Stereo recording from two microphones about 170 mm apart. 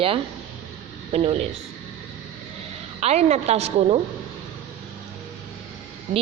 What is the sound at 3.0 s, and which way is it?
A woman's voice, 40° right (ahead or behind).